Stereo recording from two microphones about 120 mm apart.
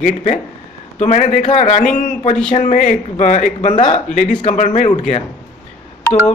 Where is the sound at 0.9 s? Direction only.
70° left (ahead or behind).